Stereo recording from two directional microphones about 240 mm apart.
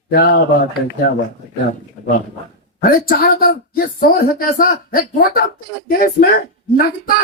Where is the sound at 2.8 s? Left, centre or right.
Left.